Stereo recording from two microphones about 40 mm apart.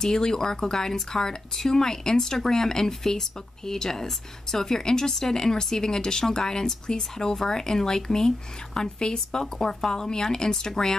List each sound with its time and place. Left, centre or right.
0.0 s speech: centre